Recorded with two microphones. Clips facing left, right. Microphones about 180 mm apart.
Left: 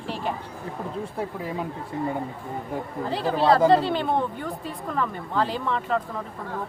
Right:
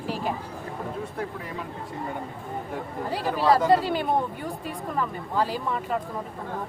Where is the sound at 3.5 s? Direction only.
30° left (ahead or behind).